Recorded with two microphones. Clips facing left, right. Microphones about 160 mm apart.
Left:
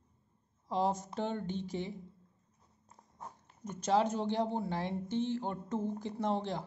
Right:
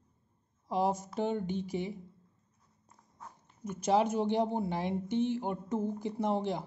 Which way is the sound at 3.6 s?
10° right (ahead or behind).